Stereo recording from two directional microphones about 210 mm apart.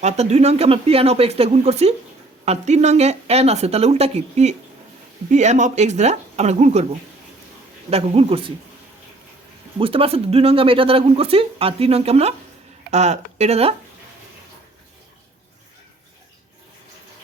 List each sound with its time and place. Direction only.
0.0 s speech: 30° right (ahead or behind)
7.9 s speech: 30° right (ahead or behind)
9.7 s speech: 25° right (ahead or behind)